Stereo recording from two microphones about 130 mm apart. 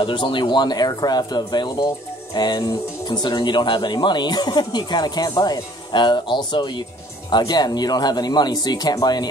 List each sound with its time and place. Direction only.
0.0 s speech: 40° left (ahead or behind)